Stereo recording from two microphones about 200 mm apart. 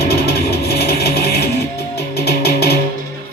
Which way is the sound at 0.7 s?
55° left (ahead or behind).